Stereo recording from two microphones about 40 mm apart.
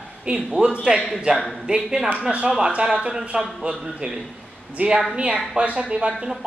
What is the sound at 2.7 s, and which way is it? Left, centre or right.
A woman's voice, right.